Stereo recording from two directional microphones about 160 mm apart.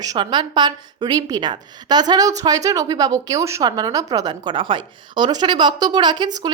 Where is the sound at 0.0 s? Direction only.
25° right (ahead or behind).